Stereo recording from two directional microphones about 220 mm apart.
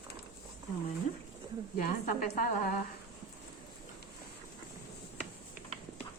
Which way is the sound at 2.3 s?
40° left (ahead or behind).